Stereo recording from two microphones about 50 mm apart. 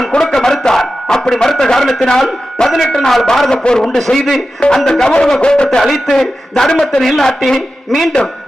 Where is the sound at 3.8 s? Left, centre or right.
Centre.